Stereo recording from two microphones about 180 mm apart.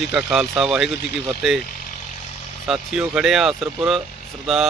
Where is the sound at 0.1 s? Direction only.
5° right (ahead or behind).